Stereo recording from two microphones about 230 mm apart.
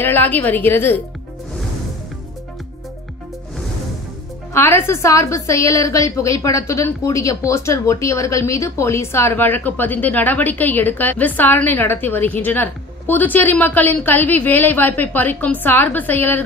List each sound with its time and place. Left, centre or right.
0.0 s a woman's voice: centre
4.6 s a woman's voice: centre